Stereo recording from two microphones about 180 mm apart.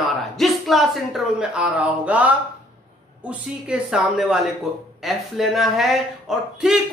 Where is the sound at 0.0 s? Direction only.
Centre (ahead or behind).